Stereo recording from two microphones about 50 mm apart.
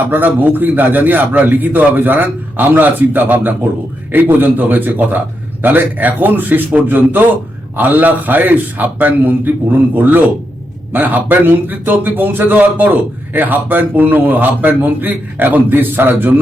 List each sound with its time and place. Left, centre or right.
0.1 s a man's voice: right